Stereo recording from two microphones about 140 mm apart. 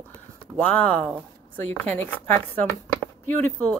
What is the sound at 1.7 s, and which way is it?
Speech, 10° left (ahead or behind).